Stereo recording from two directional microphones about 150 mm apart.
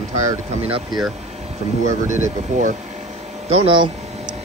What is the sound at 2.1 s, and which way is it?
Speech, 55° right (ahead or behind).